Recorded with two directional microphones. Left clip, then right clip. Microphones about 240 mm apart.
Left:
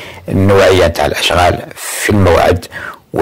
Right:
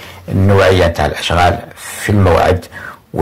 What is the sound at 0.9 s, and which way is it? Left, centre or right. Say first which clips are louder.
Speech: left 3 dB; left.